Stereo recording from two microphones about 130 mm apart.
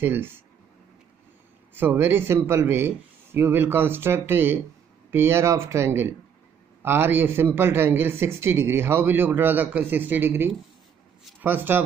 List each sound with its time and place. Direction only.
0.0 s a man's voice: 15° right (ahead or behind)
1.7 s a man's voice: 15° right (ahead or behind)